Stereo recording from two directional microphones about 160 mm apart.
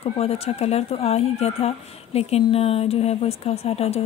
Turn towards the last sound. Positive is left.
turn(degrees=40)  # may be behind; listen again after turning